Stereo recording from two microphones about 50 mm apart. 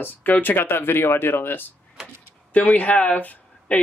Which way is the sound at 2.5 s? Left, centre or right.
Left.